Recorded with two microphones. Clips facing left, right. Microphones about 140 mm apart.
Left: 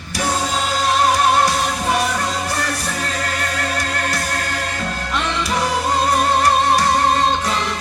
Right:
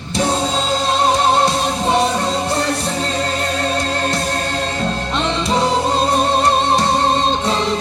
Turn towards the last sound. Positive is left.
turn(degrees=-25)  # may be behind; listen again after turning